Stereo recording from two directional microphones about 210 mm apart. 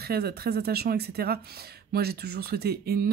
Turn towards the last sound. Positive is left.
turn(degrees=-45)  # may be behind; listen again after turning